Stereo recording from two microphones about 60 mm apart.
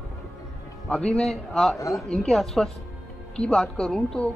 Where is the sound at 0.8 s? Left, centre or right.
Left.